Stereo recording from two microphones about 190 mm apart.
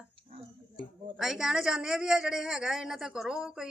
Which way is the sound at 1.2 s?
Centre (ahead or behind).